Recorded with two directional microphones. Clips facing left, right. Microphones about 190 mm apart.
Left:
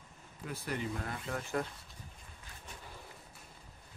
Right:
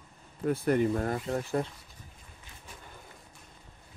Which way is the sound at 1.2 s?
30° right (ahead or behind).